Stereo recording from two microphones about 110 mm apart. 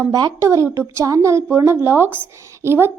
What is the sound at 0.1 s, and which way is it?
A woman's voice, 35° right (ahead or behind).